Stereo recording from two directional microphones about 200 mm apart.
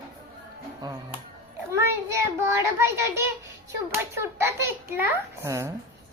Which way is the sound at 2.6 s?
15° right (ahead or behind).